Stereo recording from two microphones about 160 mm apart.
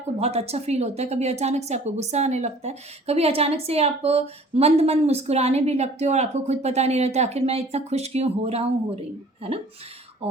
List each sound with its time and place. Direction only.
0.2 s a woman's voice: 40° right (ahead or behind)